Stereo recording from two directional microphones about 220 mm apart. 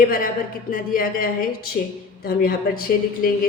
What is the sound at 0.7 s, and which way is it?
A woman's voice, 40° left (ahead or behind).